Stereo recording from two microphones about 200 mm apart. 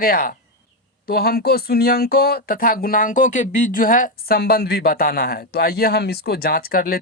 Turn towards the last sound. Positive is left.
turn(degrees=50)  # may be behind; listen again after turning